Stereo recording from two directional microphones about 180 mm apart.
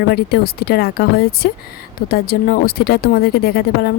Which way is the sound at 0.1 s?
60° left (ahead or behind).